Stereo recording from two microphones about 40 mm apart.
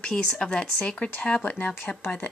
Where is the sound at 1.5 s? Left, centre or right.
Left.